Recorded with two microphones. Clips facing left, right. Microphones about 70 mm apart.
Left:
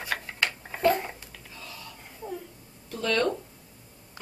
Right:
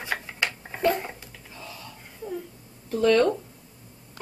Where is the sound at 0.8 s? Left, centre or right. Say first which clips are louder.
Even; centre.